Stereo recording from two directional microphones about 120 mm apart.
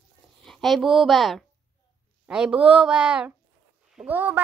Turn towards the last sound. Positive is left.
turn(degrees=-15)  # may be behind; listen again after turning